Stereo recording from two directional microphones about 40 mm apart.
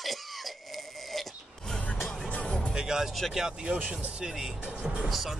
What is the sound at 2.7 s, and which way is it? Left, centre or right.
Music, centre.